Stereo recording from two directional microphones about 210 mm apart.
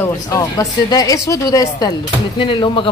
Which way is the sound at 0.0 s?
15° left (ahead or behind).